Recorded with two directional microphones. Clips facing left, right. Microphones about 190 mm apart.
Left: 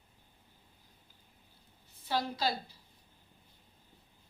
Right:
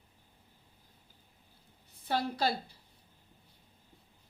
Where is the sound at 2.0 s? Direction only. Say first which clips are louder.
Right 2 dB; 55° right (ahead or behind).